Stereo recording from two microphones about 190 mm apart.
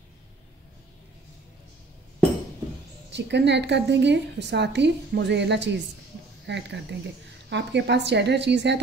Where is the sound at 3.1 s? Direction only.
65° right (ahead or behind).